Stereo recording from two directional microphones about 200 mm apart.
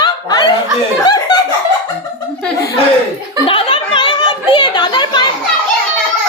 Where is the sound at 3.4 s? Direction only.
25° left (ahead or behind).